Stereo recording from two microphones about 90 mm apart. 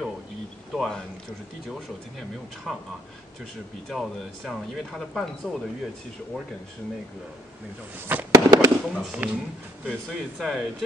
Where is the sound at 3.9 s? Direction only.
Centre (ahead or behind).